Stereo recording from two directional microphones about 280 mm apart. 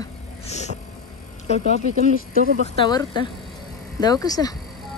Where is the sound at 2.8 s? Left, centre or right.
Centre.